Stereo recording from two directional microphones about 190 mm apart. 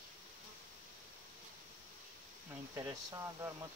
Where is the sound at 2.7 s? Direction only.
15° right (ahead or behind).